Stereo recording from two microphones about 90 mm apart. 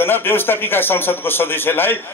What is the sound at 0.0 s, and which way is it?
A man's voice, 25° left (ahead or behind).